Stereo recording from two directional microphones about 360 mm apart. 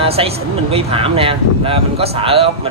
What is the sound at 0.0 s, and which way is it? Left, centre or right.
Speech, centre.